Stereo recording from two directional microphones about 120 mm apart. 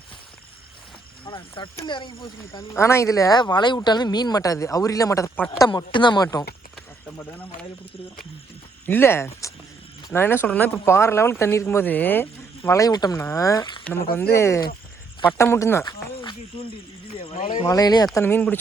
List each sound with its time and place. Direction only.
1.2 s speech: 45° left (ahead or behind)
2.7 s speech: 25° left (ahead or behind)
5.5 s speech: 40° left (ahead or behind)
7.2 s speech: 15° left (ahead or behind)
8.9 s speech: 20° left (ahead or behind)
12.8 s speech: 30° left (ahead or behind)
13.8 s speech: 20° left (ahead or behind)
15.8 s speech: 35° left (ahead or behind); by 17.7 s 50° left (ahead or behind)
17.7 s speech: 30° left (ahead or behind)
18.2 s speech: 15° left (ahead or behind)